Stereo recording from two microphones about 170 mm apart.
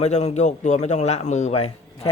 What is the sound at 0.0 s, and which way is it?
A man's voice, 40° left (ahead or behind).